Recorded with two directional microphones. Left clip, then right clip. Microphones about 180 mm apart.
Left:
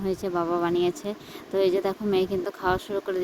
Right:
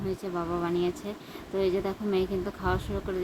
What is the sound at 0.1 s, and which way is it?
A woman's voice, 45° left (ahead or behind).